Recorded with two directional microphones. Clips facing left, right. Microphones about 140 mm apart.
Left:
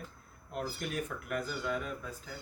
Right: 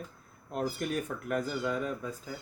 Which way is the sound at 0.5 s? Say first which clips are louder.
Right 4 dB; 35° right (ahead or behind).